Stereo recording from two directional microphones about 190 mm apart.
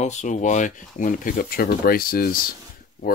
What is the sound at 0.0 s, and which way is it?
Speech, 40° left (ahead or behind).